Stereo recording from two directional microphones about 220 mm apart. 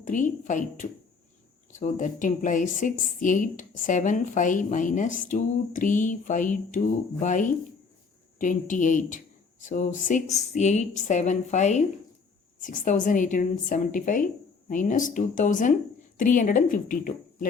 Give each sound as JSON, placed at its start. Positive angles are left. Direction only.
{"t": 0.0, "sound": "speech", "side_deg": 35}